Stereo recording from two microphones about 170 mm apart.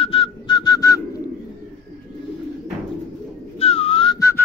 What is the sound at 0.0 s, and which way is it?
Whistling, 30° left (ahead or behind).